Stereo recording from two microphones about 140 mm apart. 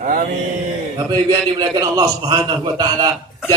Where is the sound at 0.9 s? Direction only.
25° right (ahead or behind).